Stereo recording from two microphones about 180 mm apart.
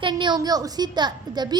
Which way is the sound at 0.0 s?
25° right (ahead or behind).